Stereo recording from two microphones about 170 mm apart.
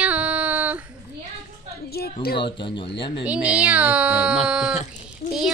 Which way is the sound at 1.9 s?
65° left (ahead or behind).